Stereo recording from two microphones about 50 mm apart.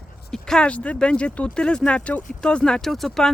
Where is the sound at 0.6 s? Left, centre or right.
Left.